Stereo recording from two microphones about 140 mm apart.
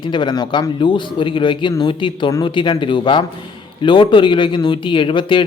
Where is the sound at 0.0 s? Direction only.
35° left (ahead or behind).